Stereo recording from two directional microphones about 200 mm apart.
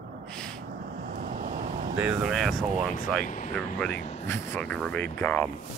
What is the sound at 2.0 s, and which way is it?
Speech, 5° right (ahead or behind).